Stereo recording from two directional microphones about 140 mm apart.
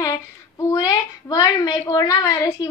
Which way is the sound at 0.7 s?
25° left (ahead or behind).